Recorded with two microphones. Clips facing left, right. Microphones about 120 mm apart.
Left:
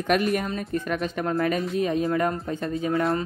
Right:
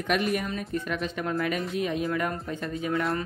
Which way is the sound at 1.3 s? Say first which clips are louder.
Left 5 dB; 30° left (ahead or behind).